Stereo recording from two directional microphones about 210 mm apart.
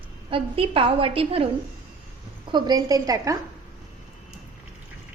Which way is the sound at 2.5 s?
20° right (ahead or behind).